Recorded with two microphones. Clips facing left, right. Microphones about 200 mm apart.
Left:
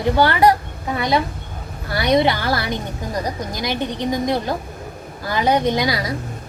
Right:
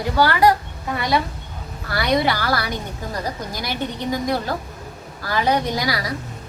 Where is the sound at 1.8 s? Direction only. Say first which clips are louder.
Left 3 dB; 20° left (ahead or behind).